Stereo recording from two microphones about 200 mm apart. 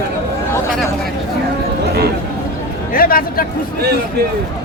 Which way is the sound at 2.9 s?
45° left (ahead or behind).